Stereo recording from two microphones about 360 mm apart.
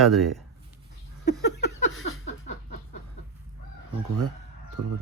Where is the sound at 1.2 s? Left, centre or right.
Left.